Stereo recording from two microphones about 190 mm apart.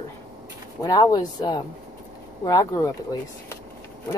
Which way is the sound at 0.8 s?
20° left (ahead or behind).